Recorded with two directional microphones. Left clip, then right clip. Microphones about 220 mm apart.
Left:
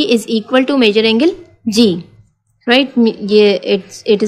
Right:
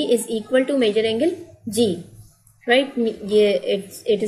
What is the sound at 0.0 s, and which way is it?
A woman's voice, 50° left (ahead or behind).